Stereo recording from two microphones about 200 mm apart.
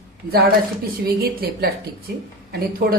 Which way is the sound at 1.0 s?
50° right (ahead or behind).